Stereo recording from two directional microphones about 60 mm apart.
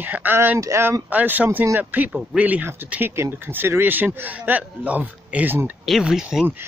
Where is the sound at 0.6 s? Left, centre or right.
Right.